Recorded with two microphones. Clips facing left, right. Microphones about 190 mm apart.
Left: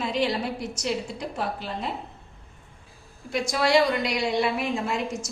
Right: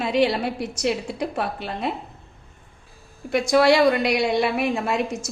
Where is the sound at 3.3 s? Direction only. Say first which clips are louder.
Right 7 dB; 65° right (ahead or behind).